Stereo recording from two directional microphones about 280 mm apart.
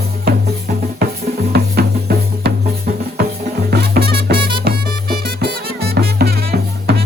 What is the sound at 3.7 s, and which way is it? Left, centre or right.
Music, right.